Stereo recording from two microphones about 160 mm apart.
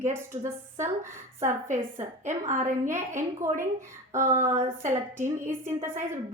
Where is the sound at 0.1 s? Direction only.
15° right (ahead or behind).